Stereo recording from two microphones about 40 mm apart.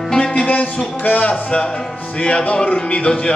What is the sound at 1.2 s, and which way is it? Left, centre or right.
Speech, left.